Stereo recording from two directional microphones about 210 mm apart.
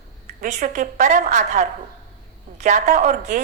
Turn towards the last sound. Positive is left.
turn(degrees=-35)  # may be behind; listen again after turning